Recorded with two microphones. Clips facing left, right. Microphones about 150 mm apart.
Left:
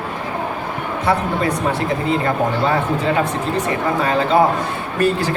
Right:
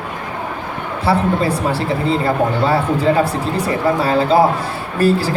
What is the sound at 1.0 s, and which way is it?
Speech, 30° right (ahead or behind).